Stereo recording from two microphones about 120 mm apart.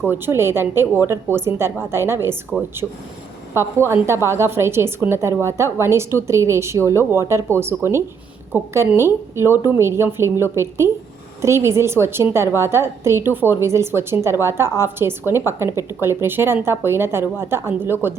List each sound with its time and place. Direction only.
0.1 s a woman's voice: 20° right (ahead or behind)
3.5 s a woman's voice: 20° right (ahead or behind)
8.5 s a woman's voice: 20° right (ahead or behind)